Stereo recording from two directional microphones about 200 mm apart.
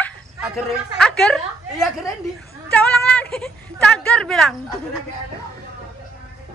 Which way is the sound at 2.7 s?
5° left (ahead or behind).